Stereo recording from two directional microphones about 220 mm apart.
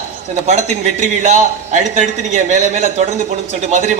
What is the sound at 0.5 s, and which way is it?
Speech, 30° right (ahead or behind).